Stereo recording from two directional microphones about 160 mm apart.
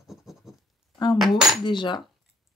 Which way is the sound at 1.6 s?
30° left (ahead or behind).